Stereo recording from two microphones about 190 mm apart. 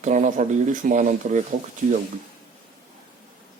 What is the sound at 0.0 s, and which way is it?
Speech, 40° right (ahead or behind).